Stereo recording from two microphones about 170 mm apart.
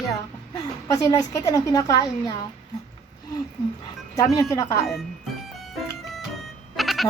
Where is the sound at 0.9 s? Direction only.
20° left (ahead or behind).